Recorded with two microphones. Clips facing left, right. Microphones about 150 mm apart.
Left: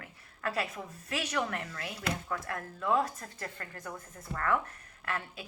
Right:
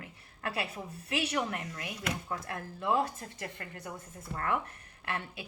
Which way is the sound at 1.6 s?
30° left (ahead or behind).